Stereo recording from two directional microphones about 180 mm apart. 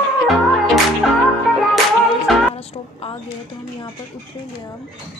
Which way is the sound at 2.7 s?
30° left (ahead or behind).